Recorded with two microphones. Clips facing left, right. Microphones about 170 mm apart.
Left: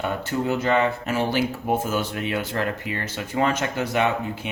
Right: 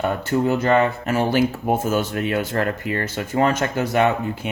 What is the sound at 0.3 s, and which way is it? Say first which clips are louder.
Speech: right 4 dB; 45° right (ahead or behind).